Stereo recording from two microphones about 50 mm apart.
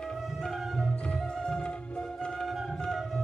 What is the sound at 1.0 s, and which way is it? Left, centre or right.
Music, centre.